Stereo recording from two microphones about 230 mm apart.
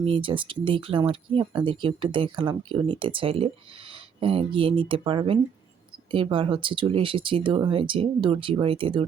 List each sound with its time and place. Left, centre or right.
0.0 s speech: right